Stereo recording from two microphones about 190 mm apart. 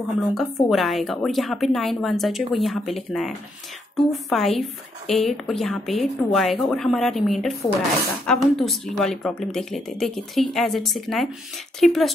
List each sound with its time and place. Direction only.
0.3 s a woman's voice: centre (ahead or behind)